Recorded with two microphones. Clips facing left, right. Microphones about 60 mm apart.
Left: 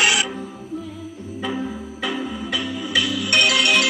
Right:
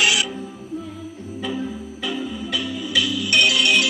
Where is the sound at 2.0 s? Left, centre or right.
Left.